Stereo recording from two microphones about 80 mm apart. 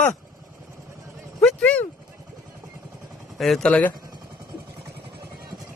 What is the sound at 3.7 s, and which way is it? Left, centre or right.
Speech, centre.